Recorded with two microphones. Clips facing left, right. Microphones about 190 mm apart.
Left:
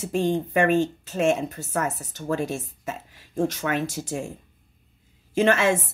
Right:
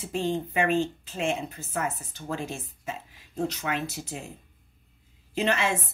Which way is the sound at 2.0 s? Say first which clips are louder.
Left 6 dB; 80° left.